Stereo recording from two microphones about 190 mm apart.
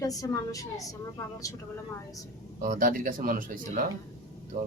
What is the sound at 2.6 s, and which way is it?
Speech, 45° right (ahead or behind).